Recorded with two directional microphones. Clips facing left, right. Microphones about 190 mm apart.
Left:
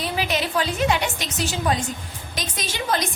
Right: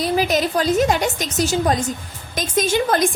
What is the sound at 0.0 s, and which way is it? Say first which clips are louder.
A woman's voice: right 6 dB; 40° right (ahead or behind).